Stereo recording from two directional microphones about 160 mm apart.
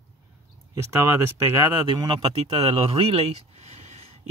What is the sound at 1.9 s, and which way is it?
Speech, 30° right (ahead or behind).